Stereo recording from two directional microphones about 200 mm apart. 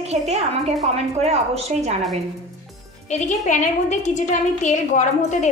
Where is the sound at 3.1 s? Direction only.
40° left (ahead or behind).